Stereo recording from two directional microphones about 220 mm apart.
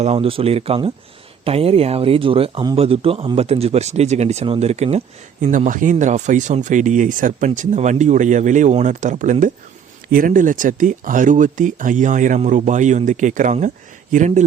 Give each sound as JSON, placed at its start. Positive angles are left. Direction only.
{"t": 0.0, "sound": "speech", "side_deg": -25}